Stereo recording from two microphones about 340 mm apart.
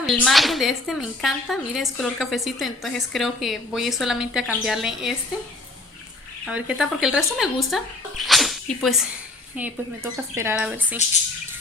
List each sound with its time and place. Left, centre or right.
0.0 s speech: centre
6.4 s speech: centre
10.3 s speech: centre